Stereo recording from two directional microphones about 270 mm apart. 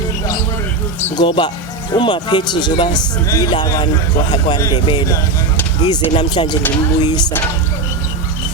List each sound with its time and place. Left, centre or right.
1.1 s speech: centre